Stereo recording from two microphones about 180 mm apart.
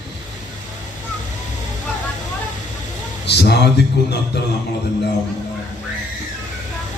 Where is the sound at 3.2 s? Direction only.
65° left (ahead or behind).